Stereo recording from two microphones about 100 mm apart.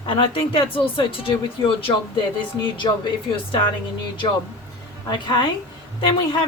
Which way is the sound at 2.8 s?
55° left (ahead or behind).